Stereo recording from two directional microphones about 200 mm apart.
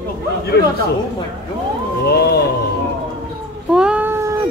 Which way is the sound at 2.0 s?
55° left (ahead or behind).